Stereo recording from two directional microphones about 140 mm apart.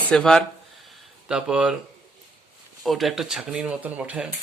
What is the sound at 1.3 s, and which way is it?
Speech, 5° right (ahead or behind).